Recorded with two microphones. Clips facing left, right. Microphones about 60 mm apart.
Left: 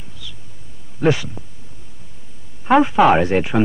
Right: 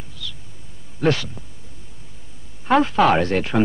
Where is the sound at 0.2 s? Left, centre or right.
Centre.